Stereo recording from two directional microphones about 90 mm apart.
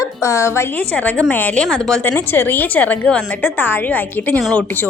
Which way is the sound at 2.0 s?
25° left (ahead or behind).